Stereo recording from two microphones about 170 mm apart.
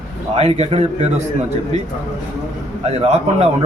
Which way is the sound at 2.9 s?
40° right (ahead or behind).